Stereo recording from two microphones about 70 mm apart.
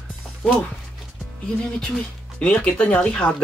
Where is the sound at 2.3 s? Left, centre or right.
Centre.